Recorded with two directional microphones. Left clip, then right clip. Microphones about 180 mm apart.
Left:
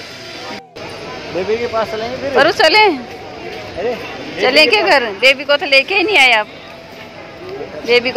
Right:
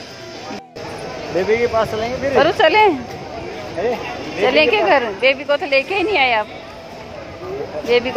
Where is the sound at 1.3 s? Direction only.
40° right (ahead or behind).